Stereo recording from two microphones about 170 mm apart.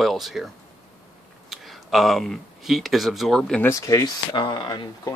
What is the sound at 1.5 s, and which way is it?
Speech, centre (ahead or behind).